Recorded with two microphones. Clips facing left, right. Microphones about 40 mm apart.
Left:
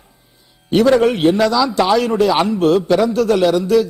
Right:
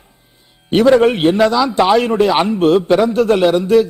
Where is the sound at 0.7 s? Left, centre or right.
Right.